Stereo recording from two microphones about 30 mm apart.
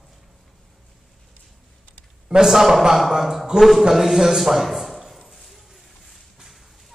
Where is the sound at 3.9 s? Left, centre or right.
Centre.